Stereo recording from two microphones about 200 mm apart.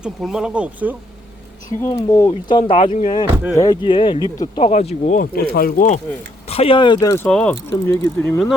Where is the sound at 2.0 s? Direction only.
20° left (ahead or behind).